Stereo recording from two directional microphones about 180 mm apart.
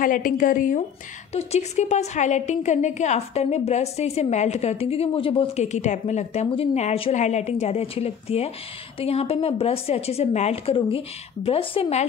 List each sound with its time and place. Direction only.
0.0 s a woman's voice: 50° left (ahead or behind); by 12.0 s 30° left (ahead or behind)